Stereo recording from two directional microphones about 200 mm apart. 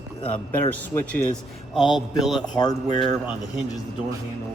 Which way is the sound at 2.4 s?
20° left (ahead or behind).